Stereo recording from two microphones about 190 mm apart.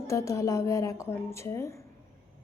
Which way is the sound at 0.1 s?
15° left (ahead or behind).